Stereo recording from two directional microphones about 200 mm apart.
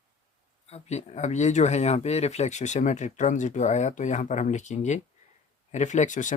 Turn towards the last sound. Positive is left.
turn(degrees=40)  # may be behind; listen again after turning